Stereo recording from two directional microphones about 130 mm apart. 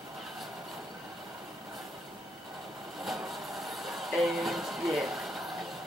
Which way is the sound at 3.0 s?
Centre (ahead or behind).